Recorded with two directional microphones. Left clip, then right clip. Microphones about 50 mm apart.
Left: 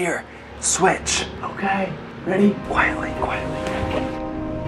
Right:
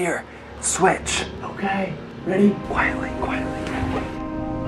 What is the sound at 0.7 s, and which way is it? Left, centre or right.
Speech, right.